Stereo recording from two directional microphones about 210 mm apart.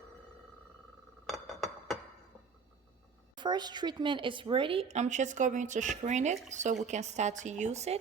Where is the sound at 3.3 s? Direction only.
20° right (ahead or behind).